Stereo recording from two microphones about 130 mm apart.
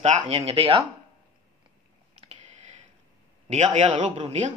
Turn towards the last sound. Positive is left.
turn(degrees=-60)  # may be behind; listen again after turning